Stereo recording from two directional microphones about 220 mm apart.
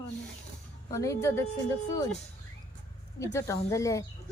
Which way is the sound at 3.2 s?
15° left (ahead or behind).